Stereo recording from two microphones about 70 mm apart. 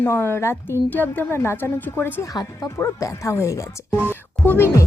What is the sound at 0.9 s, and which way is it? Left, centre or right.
Speech, left.